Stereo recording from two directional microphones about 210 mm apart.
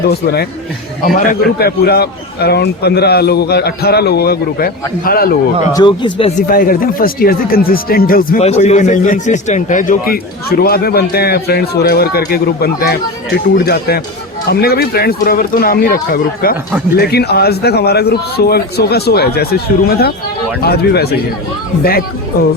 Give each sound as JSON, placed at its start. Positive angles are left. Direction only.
{"t": 0.0, "sound": "a man's voice", "side_deg": 50}
{"t": 5.7, "sound": "speech", "side_deg": 20}
{"t": 6.5, "sound": "a man's voice", "side_deg": 40}